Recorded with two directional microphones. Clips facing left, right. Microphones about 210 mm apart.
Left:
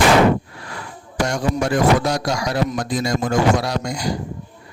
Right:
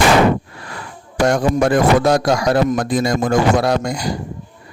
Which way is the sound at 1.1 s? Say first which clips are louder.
Right 6 dB; 55° right (ahead or behind).